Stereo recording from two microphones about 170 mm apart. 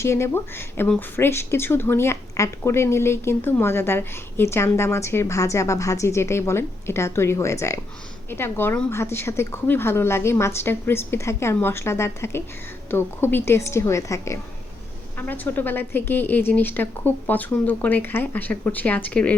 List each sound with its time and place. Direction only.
0.0 s speech: 15° left (ahead or behind)